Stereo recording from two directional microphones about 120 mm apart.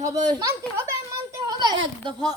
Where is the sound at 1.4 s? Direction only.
35° right (ahead or behind).